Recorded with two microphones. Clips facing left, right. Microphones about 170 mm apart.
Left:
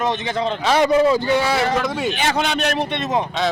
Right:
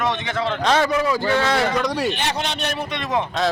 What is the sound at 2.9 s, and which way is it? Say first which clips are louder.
Speech: left 2 dB; 25° left (ahead or behind).